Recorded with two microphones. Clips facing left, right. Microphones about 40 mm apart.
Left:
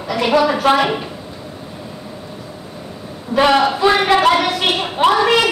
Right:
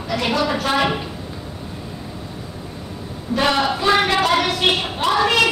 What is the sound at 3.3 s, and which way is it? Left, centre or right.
A woman's voice, centre.